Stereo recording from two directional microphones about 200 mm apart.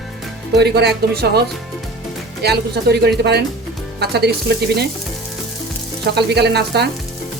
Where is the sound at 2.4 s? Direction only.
55° right (ahead or behind).